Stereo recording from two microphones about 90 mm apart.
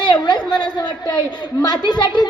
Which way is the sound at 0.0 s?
50° left (ahead or behind).